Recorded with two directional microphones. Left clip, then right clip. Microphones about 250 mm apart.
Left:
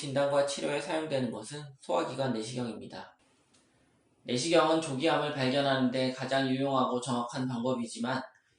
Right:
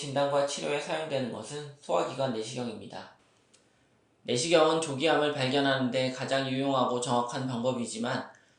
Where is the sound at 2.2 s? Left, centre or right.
Left.